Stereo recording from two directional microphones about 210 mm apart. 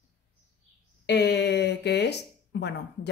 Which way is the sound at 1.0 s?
55° left (ahead or behind).